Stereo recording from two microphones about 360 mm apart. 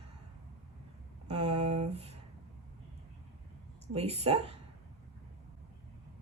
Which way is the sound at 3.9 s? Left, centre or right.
Centre.